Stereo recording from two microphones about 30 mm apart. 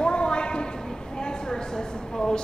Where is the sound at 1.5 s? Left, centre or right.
Left.